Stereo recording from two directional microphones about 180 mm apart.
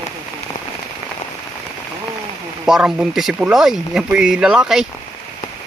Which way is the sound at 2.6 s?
5° right (ahead or behind).